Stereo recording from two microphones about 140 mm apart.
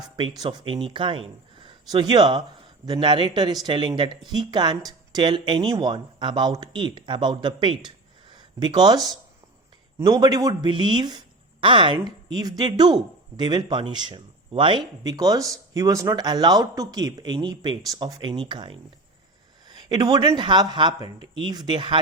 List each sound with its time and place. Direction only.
0.2 s a woman's voice: 35° right (ahead or behind)